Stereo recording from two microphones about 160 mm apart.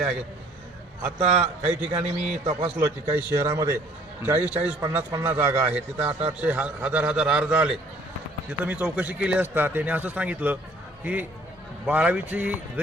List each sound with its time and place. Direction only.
1.0 s a man's voice: 5° right (ahead or behind)
2.4 s a man's voice: 40° right (ahead or behind)
2.7 s a man's voice: 10° right (ahead or behind)